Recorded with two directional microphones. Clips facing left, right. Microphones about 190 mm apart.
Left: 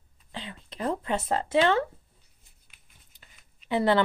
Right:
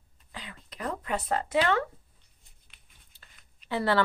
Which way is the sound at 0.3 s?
25° left (ahead or behind).